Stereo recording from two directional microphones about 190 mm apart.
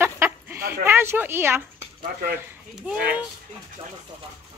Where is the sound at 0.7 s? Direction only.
10° right (ahead or behind).